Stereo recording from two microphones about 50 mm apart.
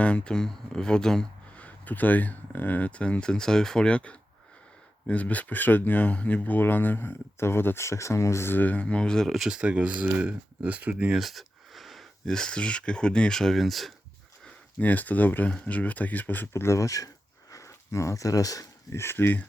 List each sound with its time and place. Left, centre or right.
0.0 s speech: left
1.5 s speech: left
7.9 s speech: left
8.4 s speech: left; by 9.2 s centre
9.2 s speech: centre
9.5 s speech: right
11.2 s a sound: centre
12.2 s speech: centre
14.8 s speech: left
16.6 s speech: left
17.6 s a sound: left
18.9 s speech: left